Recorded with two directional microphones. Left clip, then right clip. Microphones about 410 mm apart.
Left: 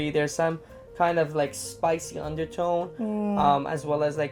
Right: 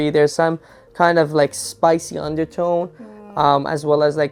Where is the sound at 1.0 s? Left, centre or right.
Right.